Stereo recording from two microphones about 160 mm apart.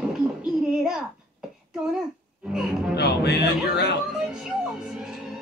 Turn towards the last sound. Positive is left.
turn(degrees=-5)  # may be behind; listen again after turning